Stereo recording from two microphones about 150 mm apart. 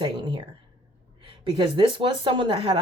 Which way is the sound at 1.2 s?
35° right (ahead or behind).